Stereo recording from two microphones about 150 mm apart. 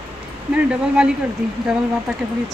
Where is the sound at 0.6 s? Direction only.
5° right (ahead or behind).